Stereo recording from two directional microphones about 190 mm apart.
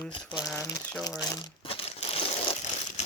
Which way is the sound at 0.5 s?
10° left (ahead or behind).